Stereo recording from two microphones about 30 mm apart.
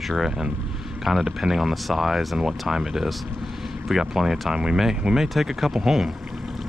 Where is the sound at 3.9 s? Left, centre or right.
Centre.